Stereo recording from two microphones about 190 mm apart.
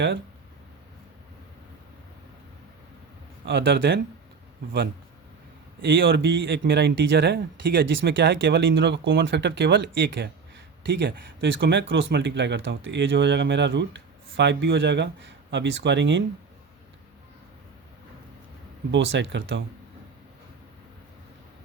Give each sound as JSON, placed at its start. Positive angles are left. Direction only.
{"t": 3.4, "sound": "speech", "side_deg": -70}
{"t": 6.0, "sound": "speech", "side_deg": -75}
{"t": 8.1, "sound": "speech", "side_deg": -65}
{"t": 11.3, "sound": "speech", "side_deg": -80}
{"t": 18.9, "sound": "speech", "side_deg": -75}